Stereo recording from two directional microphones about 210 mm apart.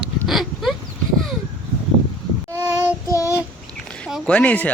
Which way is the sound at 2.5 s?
15° right (ahead or behind).